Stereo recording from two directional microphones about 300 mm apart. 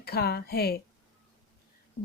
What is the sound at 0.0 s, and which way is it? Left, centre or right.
Speech, left.